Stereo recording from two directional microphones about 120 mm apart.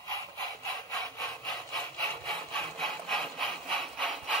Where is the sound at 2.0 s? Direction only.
5° left (ahead or behind).